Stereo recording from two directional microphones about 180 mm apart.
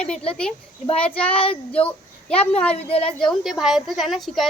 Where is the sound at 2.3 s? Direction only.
5° left (ahead or behind).